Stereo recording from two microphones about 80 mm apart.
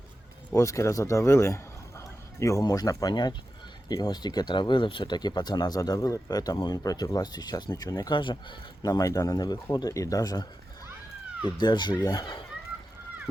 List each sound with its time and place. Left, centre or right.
0.5 s a man's voice: left
8.1 s speech: left
8.8 s a man's voice: left
11.4 s speech: left